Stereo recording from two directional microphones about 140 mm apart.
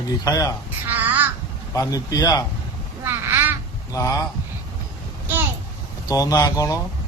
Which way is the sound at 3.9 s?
25° left (ahead or behind).